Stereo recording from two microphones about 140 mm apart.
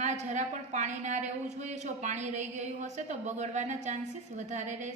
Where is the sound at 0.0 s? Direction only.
55° right (ahead or behind).